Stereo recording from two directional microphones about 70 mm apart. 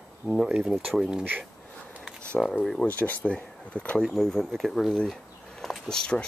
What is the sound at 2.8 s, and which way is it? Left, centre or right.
Speech, left.